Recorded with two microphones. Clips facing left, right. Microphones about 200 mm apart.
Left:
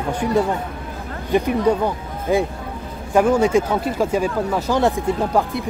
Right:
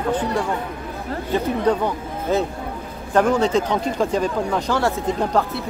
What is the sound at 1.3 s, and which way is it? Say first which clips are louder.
A woman's voice: left 3 dB; 10° left (ahead or behind).